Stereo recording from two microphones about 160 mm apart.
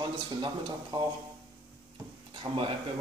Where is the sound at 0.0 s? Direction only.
30° right (ahead or behind).